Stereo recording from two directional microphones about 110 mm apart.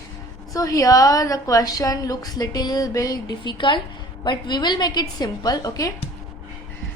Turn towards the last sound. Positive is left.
turn(degrees=30)  # may be behind; listen again after turning